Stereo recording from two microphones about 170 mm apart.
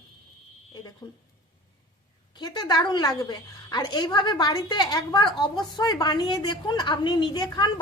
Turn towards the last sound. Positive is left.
turn(degrees=25)  # may be behind; listen again after turning